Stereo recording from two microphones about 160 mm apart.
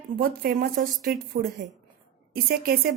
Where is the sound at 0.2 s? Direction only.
70° right (ahead or behind).